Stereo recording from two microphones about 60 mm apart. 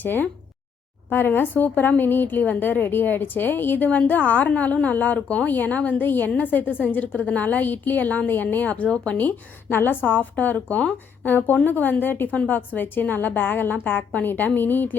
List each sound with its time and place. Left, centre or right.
0.0 s a woman's voice: left
9.1 s a woman's voice: left
10.8 s speech: centre
11.3 s a woman's voice: left